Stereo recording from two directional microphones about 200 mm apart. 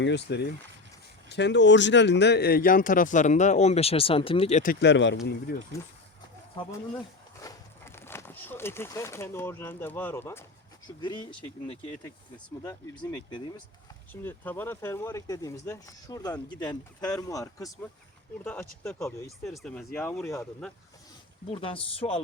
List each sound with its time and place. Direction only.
0.0 s speech: 60° left (ahead or behind); by 4.8 s 40° left (ahead or behind)
4.8 s speech: 65° left (ahead or behind)
7.4 s a sound: 10° left (ahead or behind)
11.0 s speech: 20° left (ahead or behind)
12.6 s speech: 15° left (ahead or behind)
14.1 s speech: 10° left (ahead or behind)
19.5 s speech: 5° left (ahead or behind)
21.5 s speech: 25° left (ahead or behind)